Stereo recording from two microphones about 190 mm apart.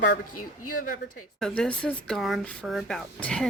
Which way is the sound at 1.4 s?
5° left (ahead or behind).